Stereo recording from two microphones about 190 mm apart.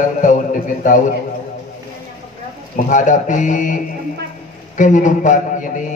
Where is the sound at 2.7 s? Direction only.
40° left (ahead or behind).